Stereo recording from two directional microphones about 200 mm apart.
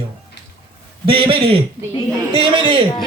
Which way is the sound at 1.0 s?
25° right (ahead or behind).